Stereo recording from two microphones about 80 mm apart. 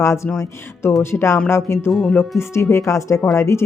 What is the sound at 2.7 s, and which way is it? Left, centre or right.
Speech, left.